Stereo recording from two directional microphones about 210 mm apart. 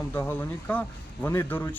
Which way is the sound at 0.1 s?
10° left (ahead or behind).